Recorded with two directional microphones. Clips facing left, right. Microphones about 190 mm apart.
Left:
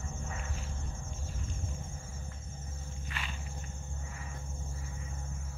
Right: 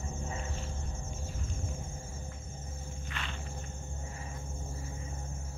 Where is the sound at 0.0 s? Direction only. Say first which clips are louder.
Right 3 dB; 25° right (ahead or behind).